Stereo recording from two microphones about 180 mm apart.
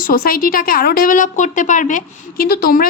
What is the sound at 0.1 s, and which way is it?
A woman's voice, 55° left (ahead or behind).